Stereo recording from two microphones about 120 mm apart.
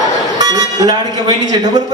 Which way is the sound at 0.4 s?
35° right (ahead or behind).